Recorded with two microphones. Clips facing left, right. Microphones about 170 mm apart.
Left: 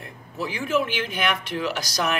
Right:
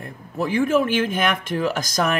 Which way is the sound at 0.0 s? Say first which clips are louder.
Right 5 dB; 50° right (ahead or behind).